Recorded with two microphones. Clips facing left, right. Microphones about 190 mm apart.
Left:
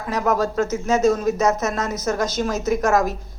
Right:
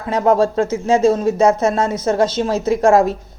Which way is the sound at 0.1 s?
30° right (ahead or behind).